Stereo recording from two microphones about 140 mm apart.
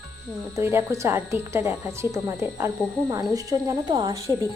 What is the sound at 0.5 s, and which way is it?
Speech, 20° right (ahead or behind).